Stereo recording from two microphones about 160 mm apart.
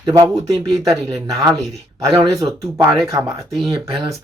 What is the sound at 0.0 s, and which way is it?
Speech, 25° right (ahead or behind).